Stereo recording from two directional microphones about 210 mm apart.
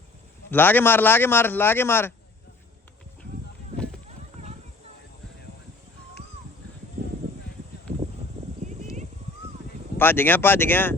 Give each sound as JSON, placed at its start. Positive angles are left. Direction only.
{"t": 0.5, "sound": "a man's voice", "side_deg": 10}
{"t": 8.6, "sound": "a sound", "side_deg": -35}
{"t": 10.0, "sound": "a man's voice", "side_deg": 10}